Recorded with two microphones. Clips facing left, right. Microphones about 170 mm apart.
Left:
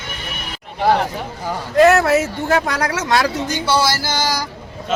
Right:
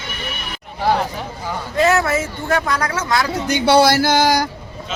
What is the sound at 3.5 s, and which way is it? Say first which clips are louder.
Speech: right 9 dB; 60° right (ahead or behind).